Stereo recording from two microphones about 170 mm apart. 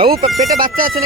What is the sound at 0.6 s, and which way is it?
Bagpipes, 55° right (ahead or behind).